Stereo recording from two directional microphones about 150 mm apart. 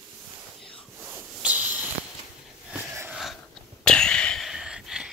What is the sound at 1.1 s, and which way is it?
Hiss, 10° right (ahead or behind).